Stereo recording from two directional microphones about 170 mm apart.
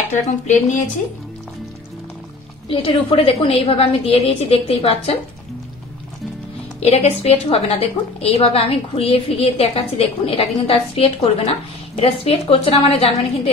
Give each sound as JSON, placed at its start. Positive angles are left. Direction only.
{"t": 0.1, "sound": "speech", "side_deg": 45}
{"t": 2.7, "sound": "a woman's voice", "side_deg": 30}
{"t": 6.8, "sound": "a woman's voice", "side_deg": 35}